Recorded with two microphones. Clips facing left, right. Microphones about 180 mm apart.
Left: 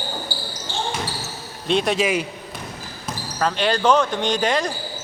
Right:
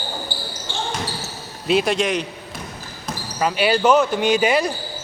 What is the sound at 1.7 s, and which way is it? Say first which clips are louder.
Speech: right 1 dB; centre (ahead or behind).